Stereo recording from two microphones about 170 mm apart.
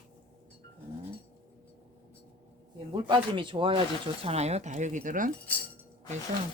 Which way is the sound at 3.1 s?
30° right (ahead or behind).